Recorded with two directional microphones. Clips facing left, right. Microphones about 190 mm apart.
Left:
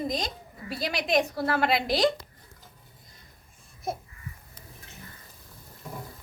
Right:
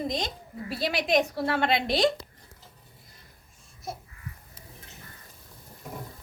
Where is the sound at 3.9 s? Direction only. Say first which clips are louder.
Left 5 dB; 55° left (ahead or behind).